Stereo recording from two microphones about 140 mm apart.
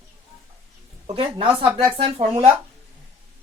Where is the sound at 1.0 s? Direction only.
50° right (ahead or behind).